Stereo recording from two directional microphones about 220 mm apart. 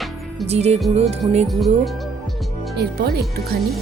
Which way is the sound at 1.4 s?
Centre (ahead or behind).